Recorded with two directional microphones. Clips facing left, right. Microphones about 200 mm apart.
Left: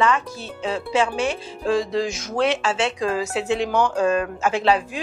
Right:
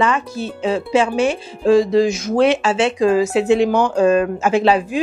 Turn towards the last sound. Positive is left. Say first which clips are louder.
# right 5 dB
turn(degrees=-10)  # may be behind; listen again after turning